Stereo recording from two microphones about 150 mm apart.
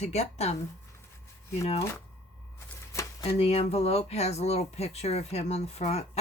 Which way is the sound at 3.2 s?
45° left (ahead or behind).